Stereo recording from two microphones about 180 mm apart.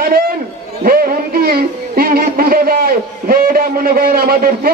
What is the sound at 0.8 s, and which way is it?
Speech, 55° right (ahead or behind).